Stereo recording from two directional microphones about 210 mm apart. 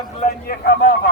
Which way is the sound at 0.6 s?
50° left (ahead or behind).